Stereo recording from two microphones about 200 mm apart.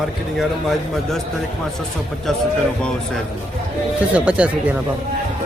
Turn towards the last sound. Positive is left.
turn(degrees=-5)  # may be behind; listen again after turning